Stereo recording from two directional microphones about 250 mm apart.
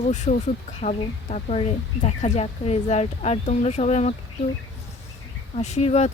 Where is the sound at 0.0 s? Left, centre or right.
Left.